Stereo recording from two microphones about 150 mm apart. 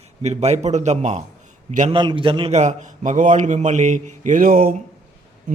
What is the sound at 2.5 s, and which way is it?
A man's voice, 50° right (ahead or behind).